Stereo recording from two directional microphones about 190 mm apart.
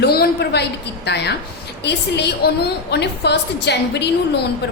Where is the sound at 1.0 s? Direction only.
60° left (ahead or behind).